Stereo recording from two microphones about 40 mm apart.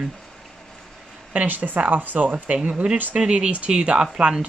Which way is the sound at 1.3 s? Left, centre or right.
Right.